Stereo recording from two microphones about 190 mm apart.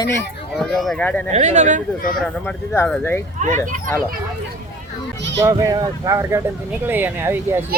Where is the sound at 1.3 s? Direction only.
35° right (ahead or behind).